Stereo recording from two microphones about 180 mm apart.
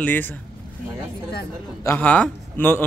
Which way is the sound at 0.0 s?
10° left (ahead or behind).